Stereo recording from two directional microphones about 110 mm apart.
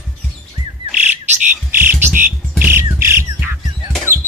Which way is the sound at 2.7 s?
20° right (ahead or behind).